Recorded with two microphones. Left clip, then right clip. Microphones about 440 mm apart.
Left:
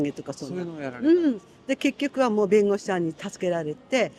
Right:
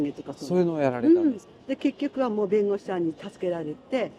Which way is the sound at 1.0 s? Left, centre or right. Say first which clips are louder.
Left 3 dB; left.